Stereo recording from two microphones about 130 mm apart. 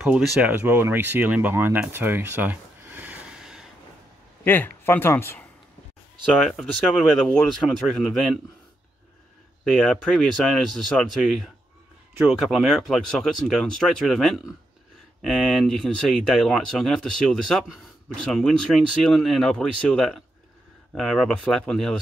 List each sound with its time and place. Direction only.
0.0 s speech: 10° right (ahead or behind)
4.5 s speech: 15° left (ahead or behind)
6.3 s speech: 5° left (ahead or behind)
9.8 s speech: 5° left (ahead or behind)